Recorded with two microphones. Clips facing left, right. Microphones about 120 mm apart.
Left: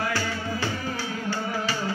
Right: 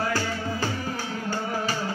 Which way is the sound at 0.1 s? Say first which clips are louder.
Right 1 dB; 45° right (ahead or behind).